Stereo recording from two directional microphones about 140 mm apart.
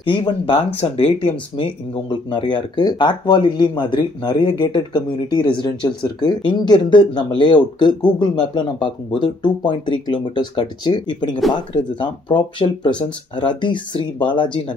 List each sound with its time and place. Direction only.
0.0 s speech: 40° left (ahead or behind)